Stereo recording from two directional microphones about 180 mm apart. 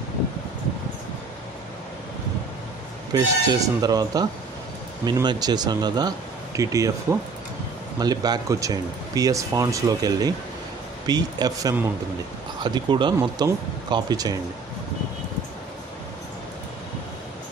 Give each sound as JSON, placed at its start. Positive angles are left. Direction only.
{"t": 3.1, "sound": "speech", "side_deg": -20}